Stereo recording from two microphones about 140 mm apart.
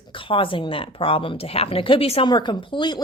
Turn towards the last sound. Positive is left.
turn(degrees=35)  # may be behind; listen again after turning